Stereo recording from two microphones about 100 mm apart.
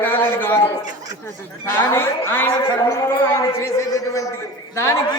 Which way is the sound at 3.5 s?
30° left (ahead or behind).